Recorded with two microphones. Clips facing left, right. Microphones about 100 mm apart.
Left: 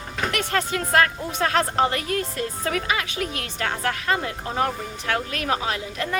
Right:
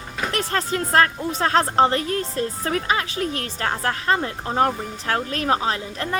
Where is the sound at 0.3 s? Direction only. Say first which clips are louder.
Right 1 dB; 35° right (ahead or behind).